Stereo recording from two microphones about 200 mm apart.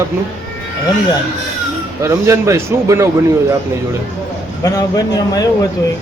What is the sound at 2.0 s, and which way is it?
A man's voice, 15° right (ahead or behind).